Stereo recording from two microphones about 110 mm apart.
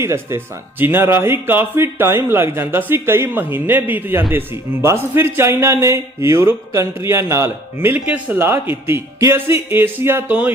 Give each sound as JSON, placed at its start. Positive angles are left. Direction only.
{"t": 0.0, "sound": "speech", "side_deg": -25}